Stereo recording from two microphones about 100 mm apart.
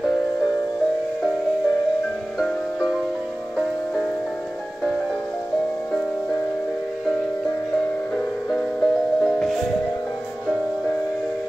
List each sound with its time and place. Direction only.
2.3 s music: centre (ahead or behind)
8.5 s music: 5° left (ahead or behind)